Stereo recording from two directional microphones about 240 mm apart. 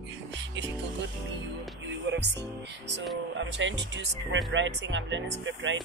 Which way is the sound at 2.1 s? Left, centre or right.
Right.